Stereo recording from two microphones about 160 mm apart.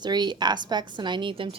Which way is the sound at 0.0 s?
25° right (ahead or behind).